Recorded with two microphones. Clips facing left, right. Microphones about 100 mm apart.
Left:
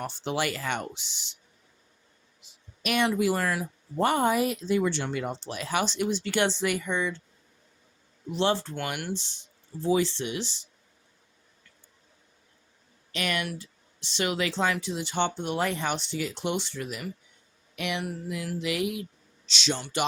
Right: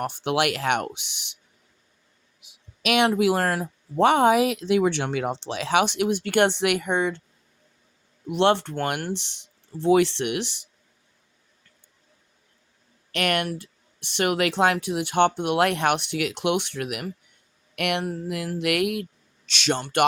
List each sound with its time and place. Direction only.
0.0 s speech: 60° right (ahead or behind)
2.8 s speech: 75° right (ahead or behind)
3.2 s speech: 65° right (ahead or behind)
3.9 s speech: 90° right; by 7.2 s 55° right (ahead or behind)
8.3 s speech: 65° right (ahead or behind)
13.1 s speech: 65° right (ahead or behind)